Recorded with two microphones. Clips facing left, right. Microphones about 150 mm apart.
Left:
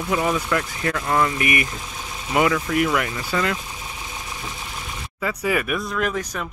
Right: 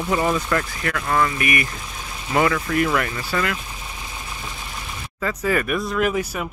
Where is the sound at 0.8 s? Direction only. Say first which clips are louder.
Left 2 dB; 20° left (ahead or behind).